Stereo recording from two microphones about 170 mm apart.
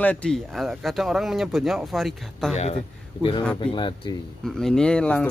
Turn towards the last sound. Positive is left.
turn(degrees=5)  # may be behind; listen again after turning